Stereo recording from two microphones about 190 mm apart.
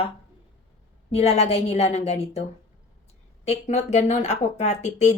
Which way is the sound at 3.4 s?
35° left (ahead or behind).